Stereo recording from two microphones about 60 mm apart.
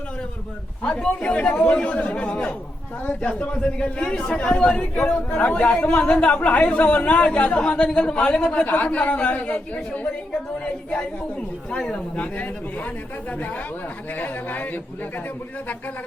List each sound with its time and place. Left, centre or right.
0.8 s a man's voice: centre
8.6 s a man's voice: left
11.7 s a man's voice: centre
14.2 s a man's voice: left